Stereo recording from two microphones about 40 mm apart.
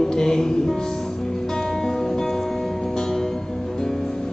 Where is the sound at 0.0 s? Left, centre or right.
Centre.